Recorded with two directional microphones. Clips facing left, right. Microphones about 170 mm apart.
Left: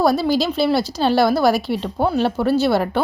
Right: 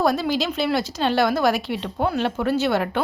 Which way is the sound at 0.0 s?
35° left (ahead or behind).